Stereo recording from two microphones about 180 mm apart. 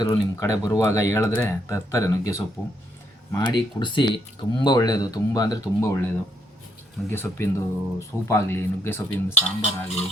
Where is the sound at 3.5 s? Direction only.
25° left (ahead or behind).